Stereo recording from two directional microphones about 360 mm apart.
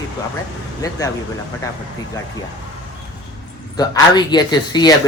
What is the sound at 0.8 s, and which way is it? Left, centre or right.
Speech, centre.